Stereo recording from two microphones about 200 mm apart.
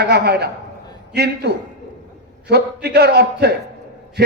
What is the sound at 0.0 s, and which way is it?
A man's voice, 55° right (ahead or behind).